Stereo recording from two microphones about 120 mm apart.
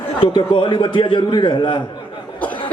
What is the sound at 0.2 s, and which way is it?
A man's voice, 40° left (ahead or behind).